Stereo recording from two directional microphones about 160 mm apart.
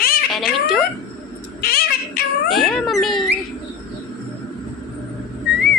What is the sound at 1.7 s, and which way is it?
Cat, 70° left (ahead or behind).